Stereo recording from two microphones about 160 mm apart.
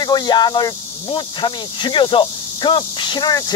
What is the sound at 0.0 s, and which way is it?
Speech, 30° left (ahead or behind).